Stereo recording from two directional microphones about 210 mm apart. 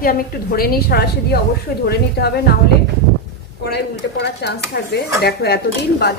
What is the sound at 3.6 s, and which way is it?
A woman's voice, 50° left (ahead or behind).